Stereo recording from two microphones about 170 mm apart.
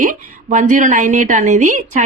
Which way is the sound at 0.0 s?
50° right (ahead or behind).